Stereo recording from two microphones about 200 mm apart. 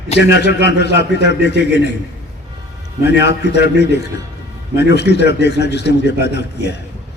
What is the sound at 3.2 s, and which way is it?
A man's voice, 60° left (ahead or behind).